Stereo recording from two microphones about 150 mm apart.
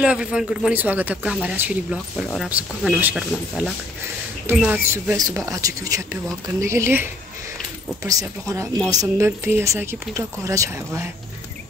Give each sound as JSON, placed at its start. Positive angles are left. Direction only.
{"t": 0.0, "sound": "speech", "side_deg": -5}